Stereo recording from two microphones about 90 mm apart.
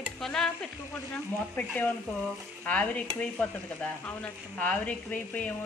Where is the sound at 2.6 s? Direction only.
15° left (ahead or behind).